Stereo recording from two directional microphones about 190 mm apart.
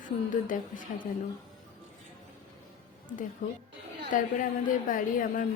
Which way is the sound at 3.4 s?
45° left (ahead or behind).